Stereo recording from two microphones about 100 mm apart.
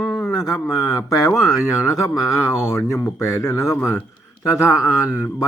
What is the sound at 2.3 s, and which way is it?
A man's voice, 25° left (ahead or behind).